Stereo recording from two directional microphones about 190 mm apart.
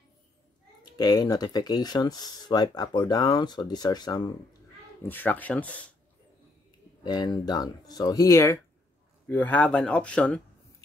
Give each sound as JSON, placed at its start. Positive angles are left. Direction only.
{"t": 0.9, "sound": "speech", "side_deg": 20}
{"t": 5.0, "sound": "speech", "side_deg": 10}
{"t": 7.1, "sound": "speech", "side_deg": 20}